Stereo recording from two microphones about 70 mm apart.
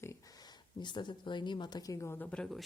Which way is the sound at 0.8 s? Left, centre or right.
Left.